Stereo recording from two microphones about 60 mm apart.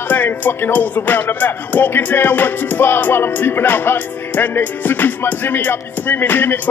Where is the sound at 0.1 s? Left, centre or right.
Left.